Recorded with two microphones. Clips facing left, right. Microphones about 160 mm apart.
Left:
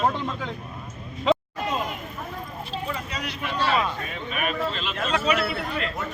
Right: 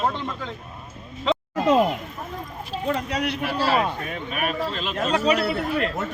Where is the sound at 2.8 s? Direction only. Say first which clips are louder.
Right 7 dB; 65° right (ahead or behind).